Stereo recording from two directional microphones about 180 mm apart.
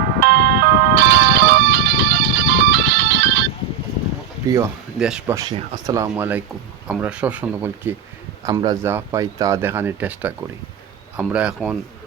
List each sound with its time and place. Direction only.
0.2 s music: 60° right (ahead or behind); by 3.4 s 75° right (ahead or behind)
4.4 s speech: 20° right (ahead or behind)
4.9 s speech: 5° right (ahead or behind)
5.3 s speech: 20° right (ahead or behind); by 11.8 s 5° right (ahead or behind)